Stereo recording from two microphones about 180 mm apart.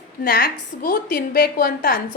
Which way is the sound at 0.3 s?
55° left (ahead or behind).